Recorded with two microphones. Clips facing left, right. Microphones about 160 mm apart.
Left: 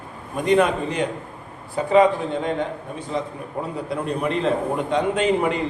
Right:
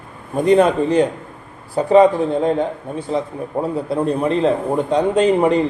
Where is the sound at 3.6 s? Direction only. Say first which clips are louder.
Right 7 dB; 30° right (ahead or behind).